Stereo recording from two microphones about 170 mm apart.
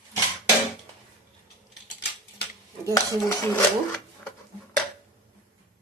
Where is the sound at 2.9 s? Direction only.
15° left (ahead or behind).